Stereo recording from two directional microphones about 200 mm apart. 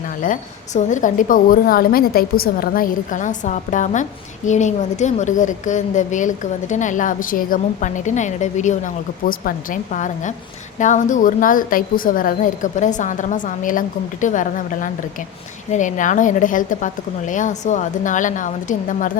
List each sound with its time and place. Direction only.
0.2 s a woman's voice: 40° left (ahead or behind)